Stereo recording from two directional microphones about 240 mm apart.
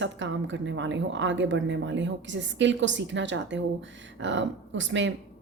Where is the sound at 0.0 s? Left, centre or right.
Right.